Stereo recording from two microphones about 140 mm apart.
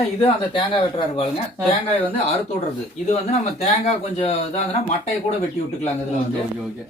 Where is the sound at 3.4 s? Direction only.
45° left (ahead or behind).